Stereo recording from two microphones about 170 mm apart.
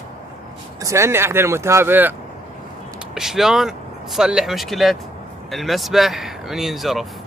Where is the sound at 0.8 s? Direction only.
20° right (ahead or behind).